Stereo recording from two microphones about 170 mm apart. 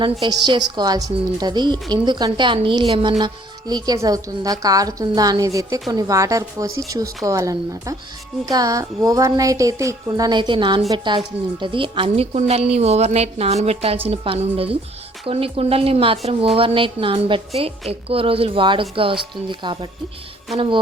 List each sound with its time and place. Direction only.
0.0 s a woman's voice: 25° right (ahead or behind)